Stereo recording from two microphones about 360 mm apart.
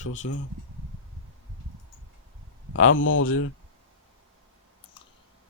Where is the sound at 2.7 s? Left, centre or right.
Left.